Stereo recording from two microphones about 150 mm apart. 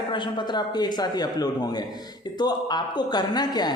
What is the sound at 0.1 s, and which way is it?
A man's voice, 30° left (ahead or behind).